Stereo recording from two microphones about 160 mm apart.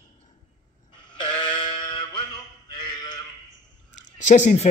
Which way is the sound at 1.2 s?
30° left (ahead or behind).